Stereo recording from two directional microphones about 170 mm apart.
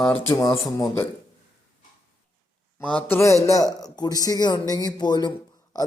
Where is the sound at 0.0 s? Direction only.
15° left (ahead or behind).